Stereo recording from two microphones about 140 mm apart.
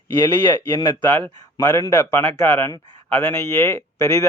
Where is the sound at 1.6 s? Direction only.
25° left (ahead or behind).